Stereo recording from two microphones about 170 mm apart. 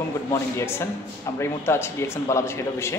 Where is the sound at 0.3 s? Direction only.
15° left (ahead or behind).